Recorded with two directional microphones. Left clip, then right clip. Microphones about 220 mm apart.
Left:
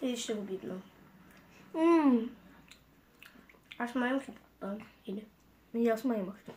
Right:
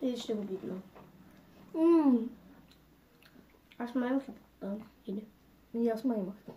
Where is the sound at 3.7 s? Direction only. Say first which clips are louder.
Left 1 dB; 30° left (ahead or behind).